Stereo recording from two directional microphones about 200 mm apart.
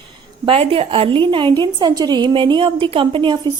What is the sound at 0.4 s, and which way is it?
Speech, 30° right (ahead or behind).